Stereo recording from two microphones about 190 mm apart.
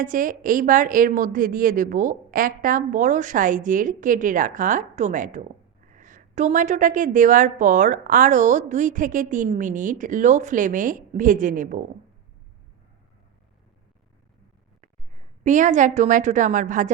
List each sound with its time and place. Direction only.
0.0 s a woman's voice: 45° right (ahead or behind)
15.4 s a woman's voice: 40° right (ahead or behind)